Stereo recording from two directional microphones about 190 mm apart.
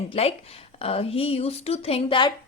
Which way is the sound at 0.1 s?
30° left (ahead or behind).